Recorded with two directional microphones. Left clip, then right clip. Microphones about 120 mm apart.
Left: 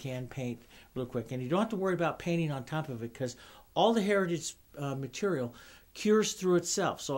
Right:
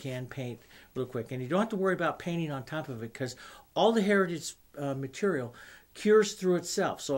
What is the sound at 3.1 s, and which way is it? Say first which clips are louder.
Speech: even; 15° left (ahead or behind).